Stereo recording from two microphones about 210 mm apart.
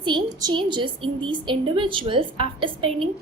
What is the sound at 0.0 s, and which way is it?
A woman's voice, 20° right (ahead or behind).